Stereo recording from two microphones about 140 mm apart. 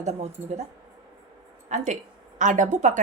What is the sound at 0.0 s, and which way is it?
Speech, 50° right (ahead or behind).